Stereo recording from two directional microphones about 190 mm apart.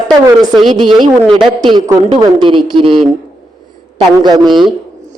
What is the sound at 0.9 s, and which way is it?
A man's voice, 25° right (ahead or behind).